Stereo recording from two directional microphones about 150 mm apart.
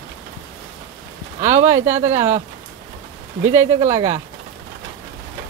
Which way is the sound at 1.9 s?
50° right (ahead or behind).